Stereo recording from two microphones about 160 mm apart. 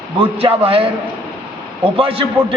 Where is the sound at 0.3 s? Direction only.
35° right (ahead or behind).